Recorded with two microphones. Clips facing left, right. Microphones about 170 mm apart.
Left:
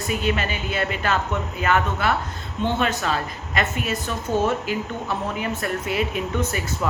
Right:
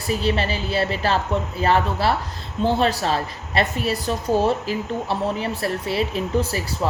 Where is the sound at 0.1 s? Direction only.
35° right (ahead or behind).